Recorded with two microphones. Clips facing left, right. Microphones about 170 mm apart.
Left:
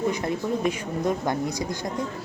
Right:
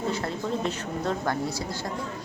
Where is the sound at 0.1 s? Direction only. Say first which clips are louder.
Left 3 dB; 15° left (ahead or behind).